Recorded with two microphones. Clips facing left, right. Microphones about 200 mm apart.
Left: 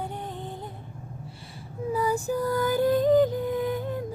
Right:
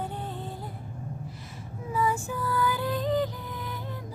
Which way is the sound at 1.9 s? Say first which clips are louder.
Left 3 dB; 35° left (ahead or behind).